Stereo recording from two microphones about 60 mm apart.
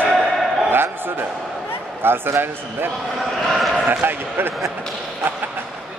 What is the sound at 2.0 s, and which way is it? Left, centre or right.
Speech, right.